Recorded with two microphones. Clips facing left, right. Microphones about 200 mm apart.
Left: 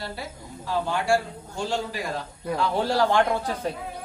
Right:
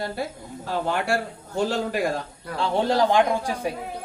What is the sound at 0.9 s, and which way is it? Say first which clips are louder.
Speech: left 1 dB; 60° right (ahead or behind).